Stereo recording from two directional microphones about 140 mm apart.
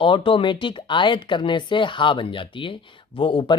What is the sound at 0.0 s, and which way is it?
Speech, 35° left (ahead or behind).